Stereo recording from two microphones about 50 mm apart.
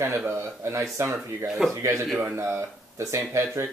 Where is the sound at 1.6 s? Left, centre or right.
Centre.